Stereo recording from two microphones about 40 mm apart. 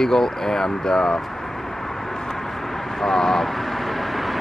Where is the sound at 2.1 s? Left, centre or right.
Centre.